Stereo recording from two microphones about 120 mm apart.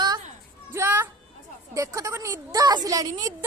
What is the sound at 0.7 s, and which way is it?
A woman's voice, 20° right (ahead or behind).